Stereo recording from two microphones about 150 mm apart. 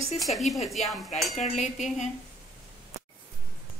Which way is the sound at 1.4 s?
50° left (ahead or behind).